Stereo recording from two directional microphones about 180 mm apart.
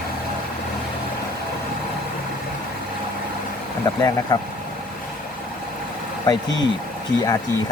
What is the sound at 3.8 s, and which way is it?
Speech, 20° left (ahead or behind).